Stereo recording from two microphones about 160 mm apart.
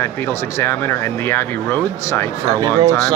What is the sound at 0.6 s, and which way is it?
Speech, 15° left (ahead or behind).